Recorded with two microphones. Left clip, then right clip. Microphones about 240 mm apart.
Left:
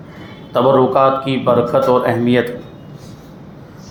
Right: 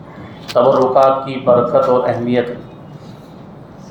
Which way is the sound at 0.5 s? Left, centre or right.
Left.